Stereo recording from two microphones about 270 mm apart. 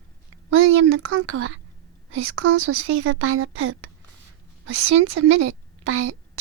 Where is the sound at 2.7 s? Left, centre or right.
Right.